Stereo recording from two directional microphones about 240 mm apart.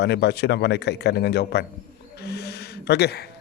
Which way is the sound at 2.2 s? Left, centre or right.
Left.